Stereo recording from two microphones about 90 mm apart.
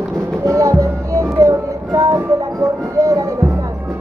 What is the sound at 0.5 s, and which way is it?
Music, 40° right (ahead or behind).